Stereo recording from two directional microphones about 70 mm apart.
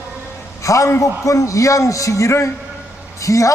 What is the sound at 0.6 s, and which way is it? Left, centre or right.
A man's voice, left.